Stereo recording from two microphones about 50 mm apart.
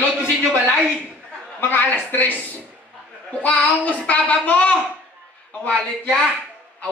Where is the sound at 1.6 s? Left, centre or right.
Left.